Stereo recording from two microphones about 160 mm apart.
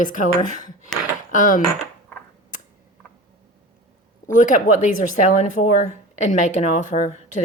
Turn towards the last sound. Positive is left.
turn(degrees=50)  # may be behind; listen again after turning